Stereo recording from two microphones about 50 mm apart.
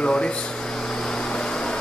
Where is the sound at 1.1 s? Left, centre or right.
Centre.